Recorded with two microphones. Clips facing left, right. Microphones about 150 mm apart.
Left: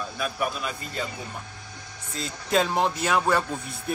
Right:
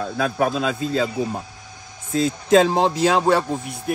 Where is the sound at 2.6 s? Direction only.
30° right (ahead or behind).